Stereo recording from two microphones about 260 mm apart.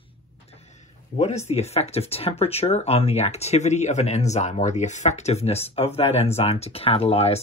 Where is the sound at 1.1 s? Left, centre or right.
Left.